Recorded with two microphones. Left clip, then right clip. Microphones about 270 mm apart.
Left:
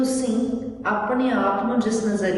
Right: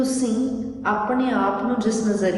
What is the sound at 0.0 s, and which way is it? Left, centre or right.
A woman's voice, centre.